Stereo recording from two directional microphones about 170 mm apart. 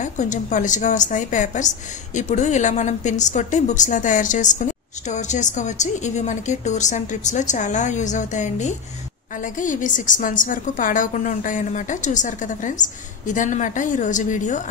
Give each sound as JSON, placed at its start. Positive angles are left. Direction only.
{"t": 0.0, "sound": "a woman's voice", "side_deg": 45}